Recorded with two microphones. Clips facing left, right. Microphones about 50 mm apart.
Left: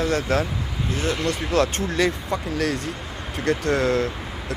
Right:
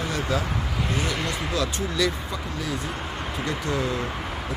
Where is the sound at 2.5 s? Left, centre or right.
Left.